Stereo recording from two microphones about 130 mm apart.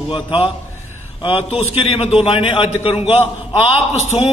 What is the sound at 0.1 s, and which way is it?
A man's voice, 40° left (ahead or behind).